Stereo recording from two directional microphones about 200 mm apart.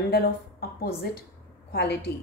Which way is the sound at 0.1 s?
50° left (ahead or behind).